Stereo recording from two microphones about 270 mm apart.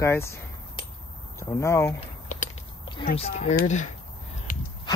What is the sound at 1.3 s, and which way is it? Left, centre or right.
Speech, centre.